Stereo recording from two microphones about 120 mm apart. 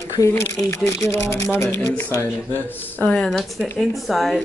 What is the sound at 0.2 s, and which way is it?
A man's voice, 25° left (ahead or behind).